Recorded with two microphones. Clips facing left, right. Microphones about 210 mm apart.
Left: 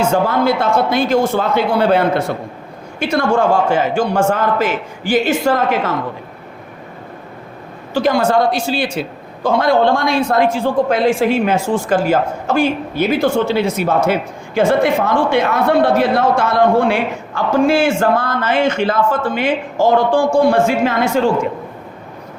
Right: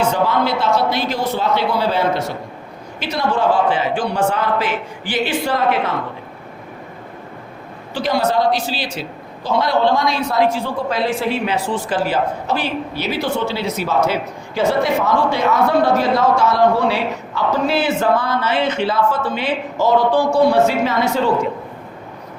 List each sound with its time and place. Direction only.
0.1 s a man's voice: 50° left (ahead or behind)
7.9 s a man's voice: 50° left (ahead or behind)